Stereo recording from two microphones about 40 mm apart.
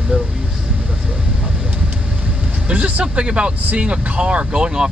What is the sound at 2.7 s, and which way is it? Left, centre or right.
Speech, right.